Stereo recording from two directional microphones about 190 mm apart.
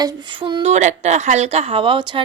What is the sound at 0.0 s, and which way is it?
Speech, 25° right (ahead or behind).